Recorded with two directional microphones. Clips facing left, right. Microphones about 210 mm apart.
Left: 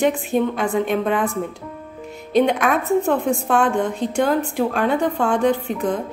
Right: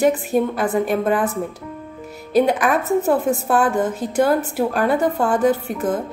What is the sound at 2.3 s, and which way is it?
A woman's voice, 5° right (ahead or behind).